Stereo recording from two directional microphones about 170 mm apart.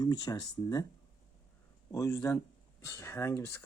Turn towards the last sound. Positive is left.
turn(degrees=15)  # may be behind; listen again after turning